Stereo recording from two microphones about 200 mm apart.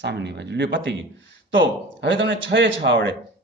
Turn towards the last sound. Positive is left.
turn(degrees=-65)  # may be behind; listen again after turning